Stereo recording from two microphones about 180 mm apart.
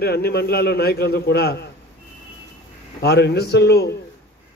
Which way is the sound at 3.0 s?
65° left (ahead or behind).